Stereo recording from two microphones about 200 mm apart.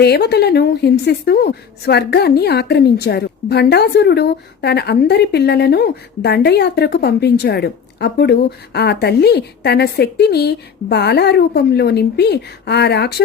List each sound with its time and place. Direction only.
0.0 s a woman's voice: 55° left (ahead or behind)